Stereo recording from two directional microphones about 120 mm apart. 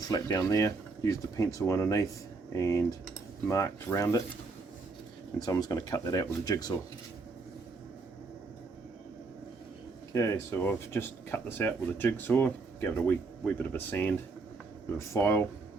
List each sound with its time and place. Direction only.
0.1 s speech: 30° left (ahead or behind)
5.4 s speech: 30° left (ahead or behind)
10.1 s speech: 25° left (ahead or behind)